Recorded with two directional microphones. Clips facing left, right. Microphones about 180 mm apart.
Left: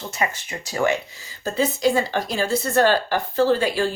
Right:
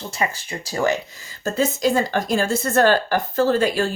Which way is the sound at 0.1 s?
30° right (ahead or behind).